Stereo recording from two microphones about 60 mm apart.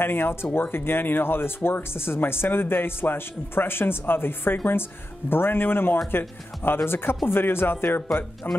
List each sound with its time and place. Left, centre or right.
0.0 s speech: left